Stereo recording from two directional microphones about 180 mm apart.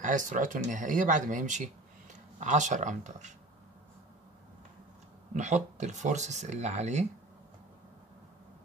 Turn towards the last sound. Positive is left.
turn(degrees=-40)  # may be behind; listen again after turning